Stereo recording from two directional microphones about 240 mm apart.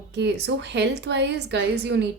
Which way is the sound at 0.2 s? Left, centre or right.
Right.